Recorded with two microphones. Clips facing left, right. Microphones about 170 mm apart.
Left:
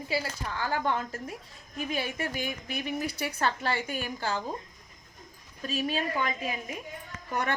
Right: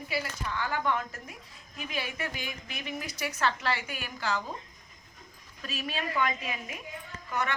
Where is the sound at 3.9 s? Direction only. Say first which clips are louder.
Left 2 dB; 30° left (ahead or behind).